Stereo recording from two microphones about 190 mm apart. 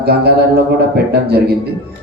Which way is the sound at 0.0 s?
55° right (ahead or behind).